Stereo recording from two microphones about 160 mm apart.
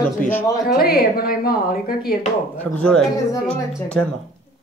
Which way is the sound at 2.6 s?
5° left (ahead or behind).